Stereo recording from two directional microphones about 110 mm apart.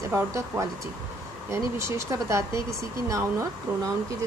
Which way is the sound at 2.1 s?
30° right (ahead or behind).